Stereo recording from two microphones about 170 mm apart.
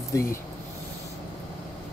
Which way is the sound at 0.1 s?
15° left (ahead or behind).